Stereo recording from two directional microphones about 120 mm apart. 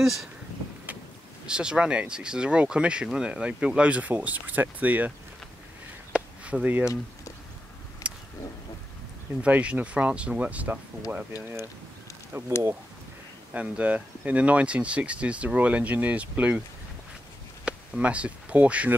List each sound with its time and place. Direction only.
0.0 s speech: centre (ahead or behind)
1.4 s speech: 5° right (ahead or behind)
6.1 s a sound: 10° right (ahead or behind)
8.0 s vehicle: 25° left (ahead or behind)
9.4 s speech: 10° right (ahead or behind)
12.3 s speech: 20° right (ahead or behind)
17.6 s speech: 10° right (ahead or behind)